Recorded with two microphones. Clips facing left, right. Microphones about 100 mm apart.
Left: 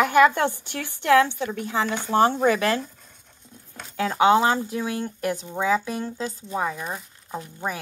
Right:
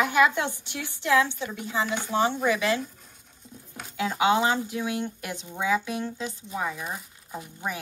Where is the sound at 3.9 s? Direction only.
45° left (ahead or behind).